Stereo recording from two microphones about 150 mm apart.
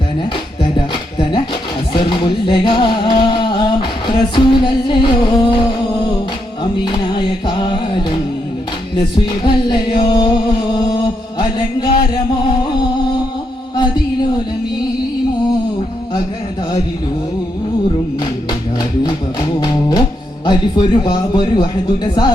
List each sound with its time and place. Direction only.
1.9 s music: 30° left (ahead or behind)
7.1 s music: 30° left (ahead or behind)
9.0 s music: 35° left (ahead or behind)
19.5 s music: 30° left (ahead or behind)